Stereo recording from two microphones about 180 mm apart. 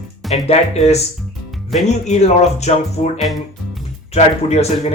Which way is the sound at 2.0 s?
40° left (ahead or behind).